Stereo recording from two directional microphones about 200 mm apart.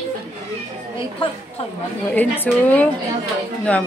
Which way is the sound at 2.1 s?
10° left (ahead or behind).